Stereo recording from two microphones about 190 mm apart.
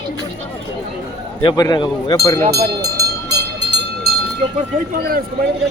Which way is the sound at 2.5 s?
60° right (ahead or behind).